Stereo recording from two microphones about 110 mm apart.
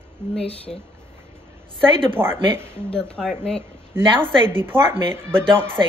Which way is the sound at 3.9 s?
20° right (ahead or behind).